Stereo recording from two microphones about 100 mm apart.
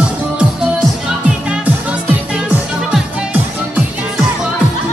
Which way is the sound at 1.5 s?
15° right (ahead or behind).